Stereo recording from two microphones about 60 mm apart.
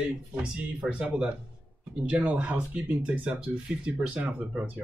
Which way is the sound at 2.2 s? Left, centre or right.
Right.